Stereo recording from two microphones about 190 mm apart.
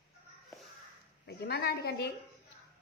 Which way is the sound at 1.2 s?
55° left (ahead or behind).